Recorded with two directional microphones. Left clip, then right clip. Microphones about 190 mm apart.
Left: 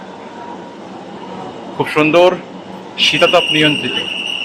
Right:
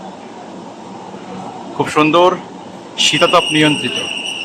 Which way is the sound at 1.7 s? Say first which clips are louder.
Even; 15° right (ahead or behind).